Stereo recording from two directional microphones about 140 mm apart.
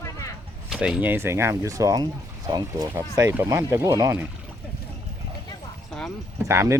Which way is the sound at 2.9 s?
20° right (ahead or behind).